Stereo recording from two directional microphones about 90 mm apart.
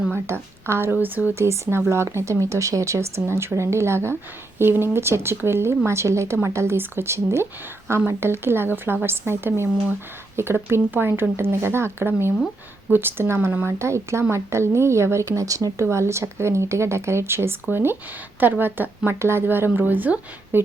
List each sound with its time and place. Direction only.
0.1 s a woman's voice: 30° right (ahead or behind)
13.7 s a woman's voice: 30° right (ahead or behind)